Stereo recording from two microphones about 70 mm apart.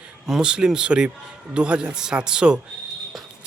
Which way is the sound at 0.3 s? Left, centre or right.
Centre.